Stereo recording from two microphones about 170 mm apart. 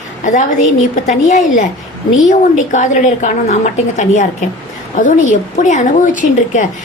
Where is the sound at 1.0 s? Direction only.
45° left (ahead or behind).